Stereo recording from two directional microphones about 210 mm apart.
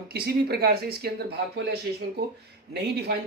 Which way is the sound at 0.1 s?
50° right (ahead or behind).